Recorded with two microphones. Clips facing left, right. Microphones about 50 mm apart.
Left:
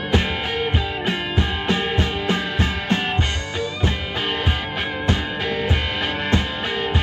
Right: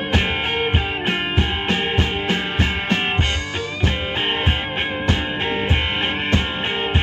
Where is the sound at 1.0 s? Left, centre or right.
Right.